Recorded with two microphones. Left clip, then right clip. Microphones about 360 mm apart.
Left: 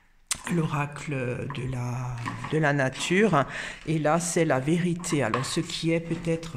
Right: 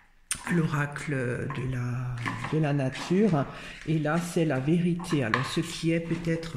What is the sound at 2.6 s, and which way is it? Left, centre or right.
Speech, centre.